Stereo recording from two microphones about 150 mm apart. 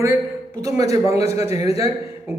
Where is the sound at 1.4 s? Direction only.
45° left (ahead or behind).